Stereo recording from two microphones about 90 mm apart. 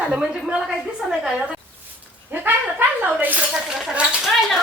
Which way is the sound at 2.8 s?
25° right (ahead or behind).